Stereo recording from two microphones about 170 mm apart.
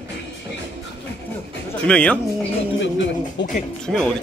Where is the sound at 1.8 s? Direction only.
5° left (ahead or behind).